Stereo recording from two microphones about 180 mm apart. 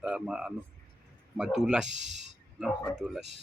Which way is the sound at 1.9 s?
40° right (ahead or behind).